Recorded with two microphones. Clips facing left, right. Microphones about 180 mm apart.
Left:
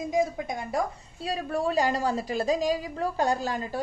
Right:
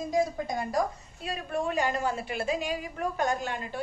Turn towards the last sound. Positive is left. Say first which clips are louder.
# left 3 dB
turn(degrees=35)  # may be behind; listen again after turning